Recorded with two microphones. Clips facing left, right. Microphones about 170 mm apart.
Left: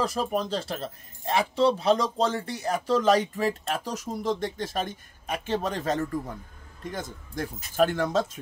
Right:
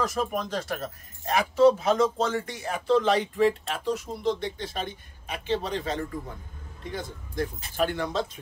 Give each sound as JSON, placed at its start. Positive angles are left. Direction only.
{"t": 0.0, "sound": "speech", "side_deg": 35}